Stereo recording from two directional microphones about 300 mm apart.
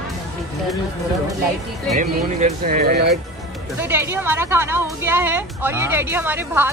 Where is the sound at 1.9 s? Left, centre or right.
Right.